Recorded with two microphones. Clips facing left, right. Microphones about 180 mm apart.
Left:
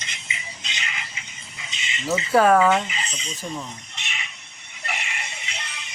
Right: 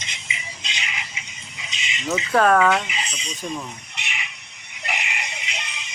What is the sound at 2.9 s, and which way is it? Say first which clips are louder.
Fowl: right 1 dB; 15° right (ahead or behind).